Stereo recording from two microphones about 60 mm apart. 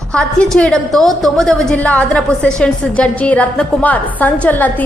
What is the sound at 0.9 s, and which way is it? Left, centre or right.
Speech, centre.